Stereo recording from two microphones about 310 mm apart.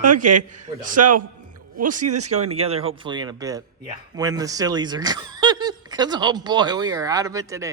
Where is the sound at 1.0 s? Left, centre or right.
Right.